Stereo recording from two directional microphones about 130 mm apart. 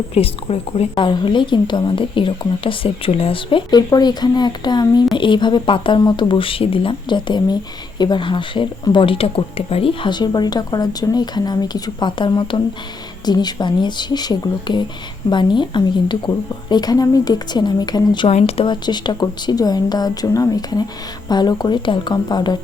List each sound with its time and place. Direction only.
0.1 s a woman's voice: 50° left (ahead or behind); by 18.3 s 35° left (ahead or behind)
18.3 s speech: 50° left (ahead or behind)
18.6 s a woman's voice: 35° left (ahead or behind)